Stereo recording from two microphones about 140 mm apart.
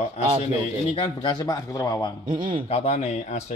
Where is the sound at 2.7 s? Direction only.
45° left (ahead or behind).